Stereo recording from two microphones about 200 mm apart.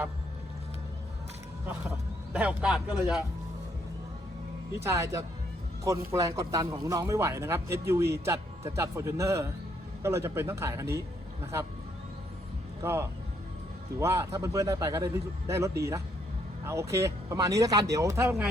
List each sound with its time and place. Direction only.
2.3 s a man's voice: 5° right (ahead or behind)
4.8 s speech: 15° right (ahead or behind)
12.8 s speech: 10° right (ahead or behind)